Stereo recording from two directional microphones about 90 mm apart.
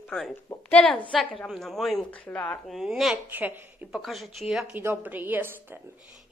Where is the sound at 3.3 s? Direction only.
20° right (ahead or behind).